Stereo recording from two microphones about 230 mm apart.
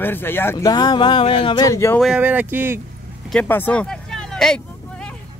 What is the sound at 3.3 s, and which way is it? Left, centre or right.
Speech, centre.